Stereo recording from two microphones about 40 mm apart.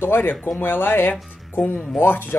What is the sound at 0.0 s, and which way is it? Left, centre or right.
Speech, left.